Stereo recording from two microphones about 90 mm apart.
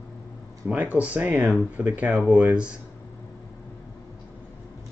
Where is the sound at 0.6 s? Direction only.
20° right (ahead or behind).